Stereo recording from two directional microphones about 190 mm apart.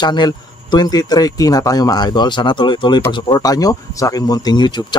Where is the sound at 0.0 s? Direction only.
20° left (ahead or behind).